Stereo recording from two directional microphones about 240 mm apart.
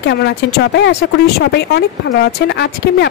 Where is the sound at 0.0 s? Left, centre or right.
Left.